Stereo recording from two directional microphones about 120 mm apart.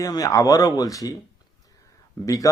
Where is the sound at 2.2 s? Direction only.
30° left (ahead or behind).